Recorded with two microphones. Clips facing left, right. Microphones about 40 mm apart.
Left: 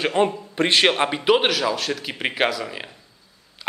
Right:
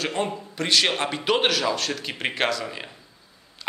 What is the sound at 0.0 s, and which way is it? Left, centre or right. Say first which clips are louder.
A man's voice: left 6 dB; left.